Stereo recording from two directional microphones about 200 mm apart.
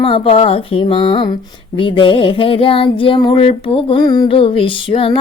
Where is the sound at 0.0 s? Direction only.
30° left (ahead or behind).